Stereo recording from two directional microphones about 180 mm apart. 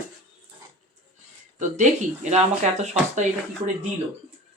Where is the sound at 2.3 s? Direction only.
40° right (ahead or behind).